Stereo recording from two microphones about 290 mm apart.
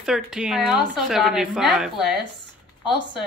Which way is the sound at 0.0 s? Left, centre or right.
Centre.